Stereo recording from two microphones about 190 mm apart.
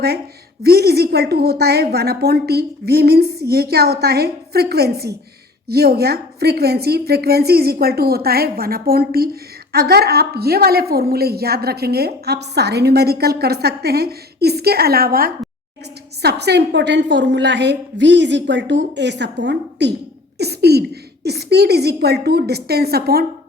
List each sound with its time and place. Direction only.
0.6 s a woman's voice: 55° right (ahead or behind)